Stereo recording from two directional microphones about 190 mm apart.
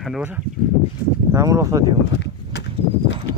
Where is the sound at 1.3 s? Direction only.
15° right (ahead or behind).